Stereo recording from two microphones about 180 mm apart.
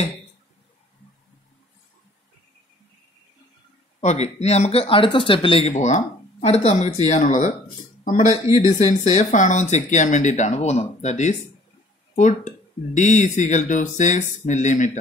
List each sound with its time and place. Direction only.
4.0 s a man's voice: 40° left (ahead or behind)
8.5 s speech: 20° right (ahead or behind)
8.7 s speech: 40° left (ahead or behind)